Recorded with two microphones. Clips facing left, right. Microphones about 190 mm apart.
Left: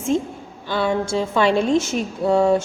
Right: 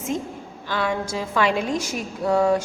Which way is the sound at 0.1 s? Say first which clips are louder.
Left 7 dB; 30° left (ahead or behind).